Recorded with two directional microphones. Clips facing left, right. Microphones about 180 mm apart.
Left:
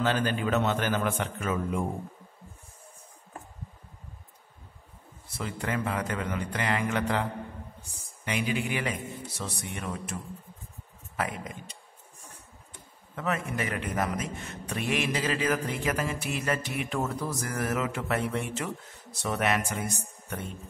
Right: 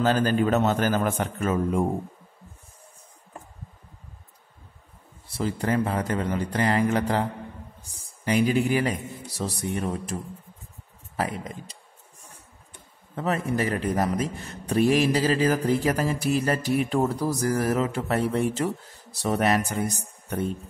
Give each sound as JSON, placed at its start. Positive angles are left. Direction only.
{"t": 0.0, "sound": "a man's voice", "side_deg": -40}
{"t": 5.3, "sound": "a man's voice", "side_deg": -35}
{"t": 13.1, "sound": "a man's voice", "side_deg": -35}